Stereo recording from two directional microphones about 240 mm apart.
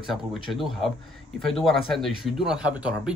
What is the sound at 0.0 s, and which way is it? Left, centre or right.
Speech, centre.